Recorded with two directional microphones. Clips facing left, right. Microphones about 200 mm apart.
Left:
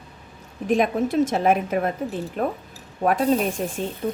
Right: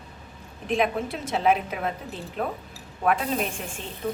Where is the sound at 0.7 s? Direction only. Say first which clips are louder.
Left 5 dB; 45° left (ahead or behind).